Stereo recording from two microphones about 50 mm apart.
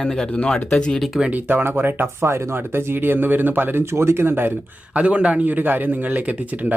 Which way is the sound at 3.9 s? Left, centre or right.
Right.